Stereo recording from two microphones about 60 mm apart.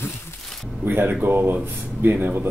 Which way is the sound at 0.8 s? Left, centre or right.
Right.